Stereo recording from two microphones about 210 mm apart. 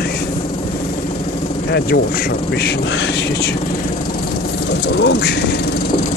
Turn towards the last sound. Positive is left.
turn(degrees=50)  # may be behind; listen again after turning